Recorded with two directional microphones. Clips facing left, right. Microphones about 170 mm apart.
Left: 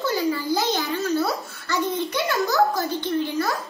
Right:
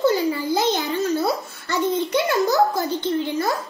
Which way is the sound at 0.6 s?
20° right (ahead or behind).